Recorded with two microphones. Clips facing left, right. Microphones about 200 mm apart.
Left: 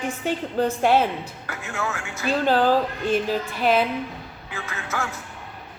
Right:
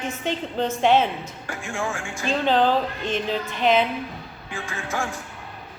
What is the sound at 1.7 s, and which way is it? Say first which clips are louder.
Speech: right 1 dB; 30° right (ahead or behind).